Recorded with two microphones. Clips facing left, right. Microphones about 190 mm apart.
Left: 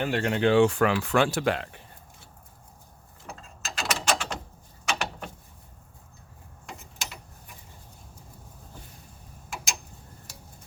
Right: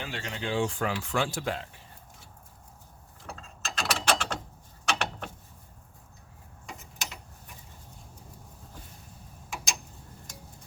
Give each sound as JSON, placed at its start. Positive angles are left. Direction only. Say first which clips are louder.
{"t": 0.0, "sound": "speech", "louder": "left 11 dB", "side_deg": 60}
{"t": 3.2, "sound": "mechanisms", "louder": "even", "side_deg": 5}
{"t": 4.9, "sound": "a sound", "louder": "even", "side_deg": 0}